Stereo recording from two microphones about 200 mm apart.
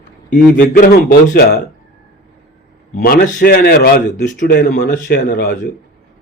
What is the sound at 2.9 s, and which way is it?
A man's voice, 45° left (ahead or behind).